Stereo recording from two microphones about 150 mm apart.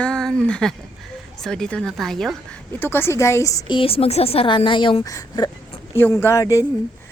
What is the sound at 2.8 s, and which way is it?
Speech, 15° left (ahead or behind).